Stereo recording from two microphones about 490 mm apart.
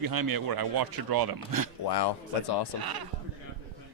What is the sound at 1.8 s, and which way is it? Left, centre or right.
Speech, left.